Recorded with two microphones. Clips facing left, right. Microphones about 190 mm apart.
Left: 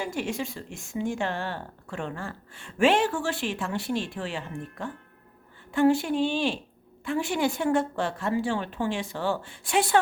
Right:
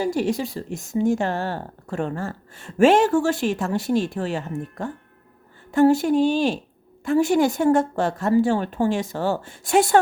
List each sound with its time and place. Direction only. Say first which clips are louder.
0.0 s a woman's voice: right 8 dB; 35° right (ahead or behind)